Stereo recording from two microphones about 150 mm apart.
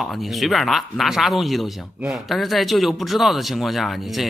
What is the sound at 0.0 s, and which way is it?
Speech, centre (ahead or behind).